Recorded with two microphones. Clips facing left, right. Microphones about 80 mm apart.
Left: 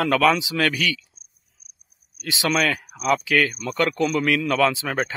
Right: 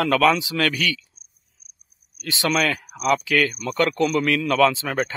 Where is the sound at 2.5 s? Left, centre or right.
Centre.